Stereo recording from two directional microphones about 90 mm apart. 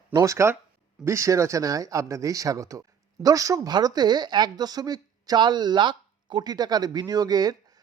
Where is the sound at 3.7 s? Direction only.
50° right (ahead or behind).